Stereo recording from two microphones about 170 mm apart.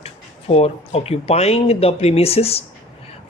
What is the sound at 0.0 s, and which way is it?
Speech, 35° left (ahead or behind).